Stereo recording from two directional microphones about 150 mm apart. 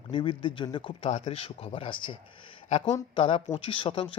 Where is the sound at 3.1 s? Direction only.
35° left (ahead or behind).